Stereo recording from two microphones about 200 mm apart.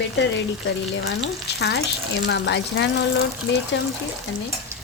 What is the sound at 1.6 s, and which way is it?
Speech, 55° left (ahead or behind).